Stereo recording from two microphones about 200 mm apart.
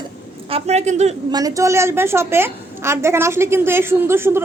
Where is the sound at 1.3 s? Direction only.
15° right (ahead or behind).